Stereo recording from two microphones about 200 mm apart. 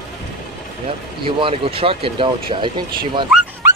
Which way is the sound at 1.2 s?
25° right (ahead or behind).